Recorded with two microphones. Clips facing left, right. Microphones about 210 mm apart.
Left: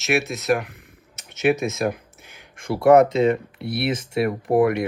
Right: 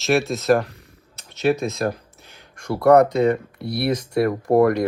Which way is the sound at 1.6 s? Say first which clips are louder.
Even; 20° left (ahead or behind).